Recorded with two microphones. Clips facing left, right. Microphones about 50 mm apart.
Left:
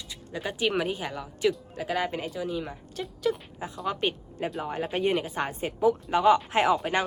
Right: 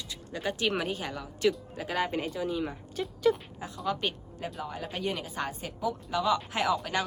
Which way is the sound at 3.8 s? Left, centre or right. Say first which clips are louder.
Left 2 dB; centre.